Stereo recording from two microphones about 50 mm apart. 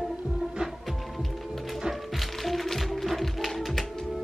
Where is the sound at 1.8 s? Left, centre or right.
Centre.